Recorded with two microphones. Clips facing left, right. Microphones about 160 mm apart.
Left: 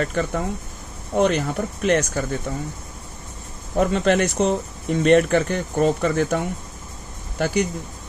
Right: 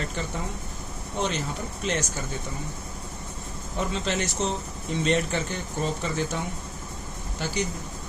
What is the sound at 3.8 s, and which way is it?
Speech, 55° left (ahead or behind).